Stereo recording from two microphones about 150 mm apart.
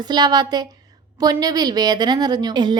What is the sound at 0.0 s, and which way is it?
A woman's voice, 30° right (ahead or behind).